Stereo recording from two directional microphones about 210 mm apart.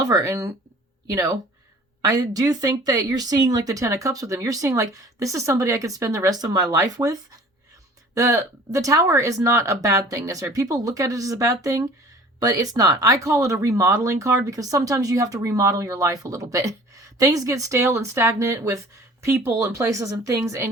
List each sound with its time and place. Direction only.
0.0 s speech: 15° right (ahead or behind)